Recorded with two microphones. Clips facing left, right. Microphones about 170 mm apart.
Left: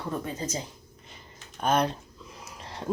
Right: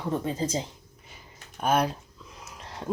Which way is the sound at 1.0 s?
10° right (ahead or behind).